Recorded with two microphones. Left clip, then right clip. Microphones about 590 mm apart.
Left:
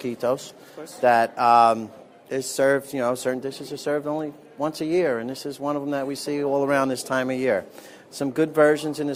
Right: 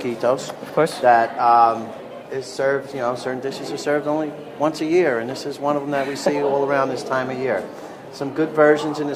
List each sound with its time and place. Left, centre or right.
0.0 s speech: left
1.0 s a sound: left
2.3 s speech: left